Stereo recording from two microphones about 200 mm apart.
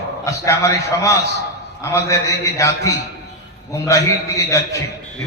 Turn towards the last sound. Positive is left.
turn(degrees=15)  # may be behind; listen again after turning